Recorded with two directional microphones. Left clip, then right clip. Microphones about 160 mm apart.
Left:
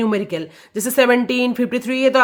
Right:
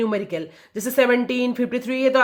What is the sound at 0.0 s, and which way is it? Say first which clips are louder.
Speech: left 3 dB; 30° left (ahead or behind).